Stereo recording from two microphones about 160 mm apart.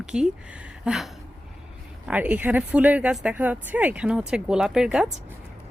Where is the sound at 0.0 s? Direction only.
5° right (ahead or behind).